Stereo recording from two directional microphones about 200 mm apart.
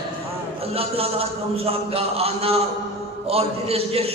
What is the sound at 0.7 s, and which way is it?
A man's voice, 30° right (ahead or behind).